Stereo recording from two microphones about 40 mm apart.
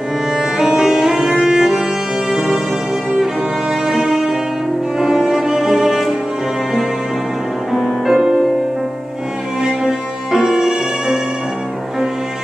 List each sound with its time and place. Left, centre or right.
0.4 s music: centre
3.8 s music: centre
4.9 s cello: centre
7.7 s music: centre
9.6 s music: centre
10.6 s violin: centre